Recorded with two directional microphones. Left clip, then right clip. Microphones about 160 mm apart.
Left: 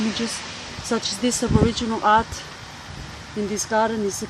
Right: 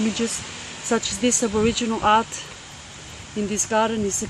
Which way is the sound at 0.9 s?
30° right (ahead or behind).